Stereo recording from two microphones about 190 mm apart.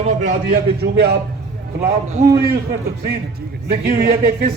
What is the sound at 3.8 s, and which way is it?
Speech, 55° right (ahead or behind).